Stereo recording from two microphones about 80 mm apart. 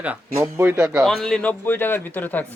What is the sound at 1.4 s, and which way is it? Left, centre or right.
A man's voice, left.